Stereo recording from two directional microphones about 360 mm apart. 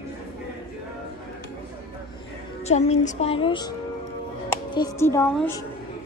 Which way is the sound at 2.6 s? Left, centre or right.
Centre.